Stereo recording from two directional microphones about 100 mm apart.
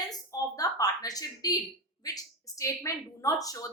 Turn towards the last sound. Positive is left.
turn(degrees=35)  # may be behind; listen again after turning